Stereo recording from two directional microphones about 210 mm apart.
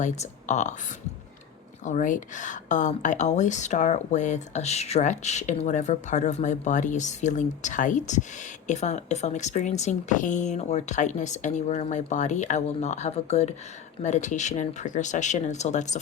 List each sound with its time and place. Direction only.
0.0 s speech: 35° left (ahead or behind)
1.8 s speech: 35° left (ahead or behind)